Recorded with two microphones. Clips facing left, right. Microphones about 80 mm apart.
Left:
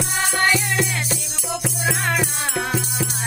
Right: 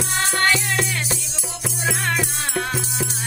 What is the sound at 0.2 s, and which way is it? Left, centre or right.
Music, centre.